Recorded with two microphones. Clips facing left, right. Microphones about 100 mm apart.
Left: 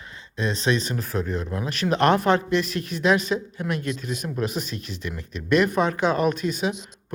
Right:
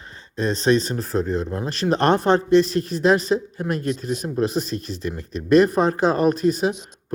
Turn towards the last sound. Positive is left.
turn(degrees=-40)  # may be behind; listen again after turning